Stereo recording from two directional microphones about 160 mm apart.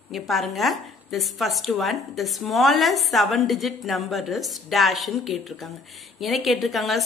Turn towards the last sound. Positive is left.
turn(degrees=0)  # may be behind; listen again after turning